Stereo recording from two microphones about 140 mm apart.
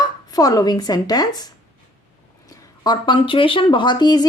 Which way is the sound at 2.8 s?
35° left (ahead or behind).